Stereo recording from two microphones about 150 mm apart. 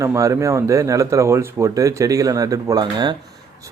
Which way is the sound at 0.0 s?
20° right (ahead or behind).